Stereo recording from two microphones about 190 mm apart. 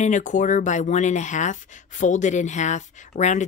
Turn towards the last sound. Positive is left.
turn(degrees=40)  # may be behind; listen again after turning